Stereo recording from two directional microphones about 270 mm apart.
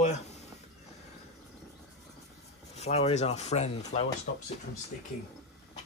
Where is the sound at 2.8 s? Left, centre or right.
Left.